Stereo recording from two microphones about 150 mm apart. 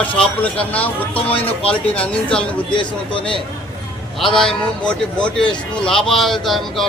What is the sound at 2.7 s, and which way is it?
Speech, 35° left (ahead or behind).